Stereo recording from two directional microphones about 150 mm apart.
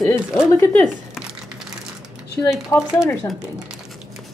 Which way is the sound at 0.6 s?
5° left (ahead or behind).